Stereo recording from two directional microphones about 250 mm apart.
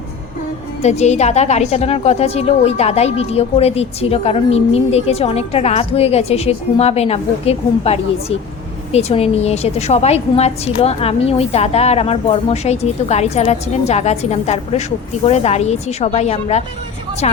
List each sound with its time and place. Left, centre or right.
0.8 s a woman's voice: left